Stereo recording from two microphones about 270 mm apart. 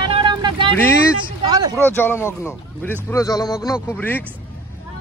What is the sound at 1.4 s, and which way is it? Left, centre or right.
Speech, centre.